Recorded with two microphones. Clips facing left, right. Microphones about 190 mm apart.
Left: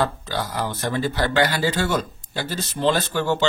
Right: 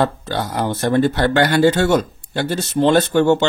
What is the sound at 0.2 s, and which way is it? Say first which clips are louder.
Speech: right 5 dB; 60° right (ahead or behind).